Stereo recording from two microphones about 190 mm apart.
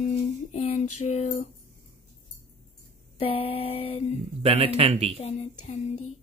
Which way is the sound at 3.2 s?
30° left (ahead or behind).